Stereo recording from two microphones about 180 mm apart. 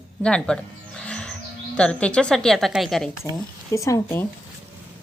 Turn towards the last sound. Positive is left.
turn(degrees=15)  # may be behind; listen again after turning